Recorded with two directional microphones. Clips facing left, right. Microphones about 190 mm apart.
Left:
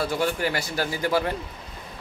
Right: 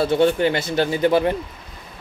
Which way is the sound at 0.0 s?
25° right (ahead or behind).